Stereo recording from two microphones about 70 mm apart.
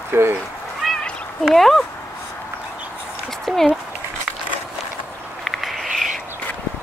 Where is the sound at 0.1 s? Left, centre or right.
Right.